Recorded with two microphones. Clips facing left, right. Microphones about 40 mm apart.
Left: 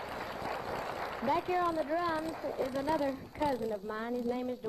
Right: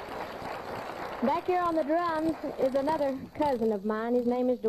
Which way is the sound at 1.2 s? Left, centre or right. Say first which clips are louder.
Right 4 dB; centre.